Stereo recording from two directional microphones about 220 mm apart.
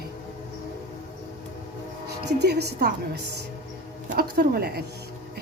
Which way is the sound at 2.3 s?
50° right (ahead or behind).